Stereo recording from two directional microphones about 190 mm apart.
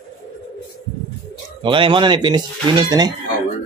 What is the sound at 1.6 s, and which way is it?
Speech, 25° right (ahead or behind).